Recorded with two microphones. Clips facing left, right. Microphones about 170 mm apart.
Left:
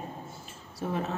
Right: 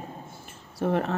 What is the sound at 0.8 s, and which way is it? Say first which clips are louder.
Speech: right 6 dB; 65° right (ahead or behind).